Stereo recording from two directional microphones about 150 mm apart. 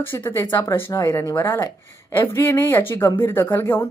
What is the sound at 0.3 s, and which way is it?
Speech, 20° left (ahead or behind).